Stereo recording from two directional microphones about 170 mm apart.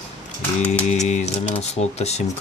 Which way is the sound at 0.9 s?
40° left (ahead or behind).